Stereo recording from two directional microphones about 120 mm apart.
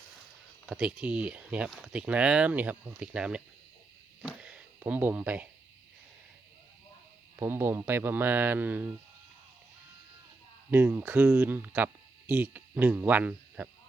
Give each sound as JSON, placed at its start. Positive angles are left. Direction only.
{"t": 0.7, "sound": "speech", "side_deg": -5}
{"t": 4.2, "sound": "a sound", "side_deg": -5}
{"t": 7.3, "sound": "speech", "side_deg": -20}
{"t": 10.7, "sound": "speech", "side_deg": -15}